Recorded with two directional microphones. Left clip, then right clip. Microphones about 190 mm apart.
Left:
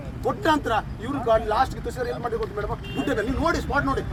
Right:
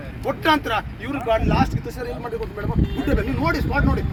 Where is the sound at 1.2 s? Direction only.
35° right (ahead or behind).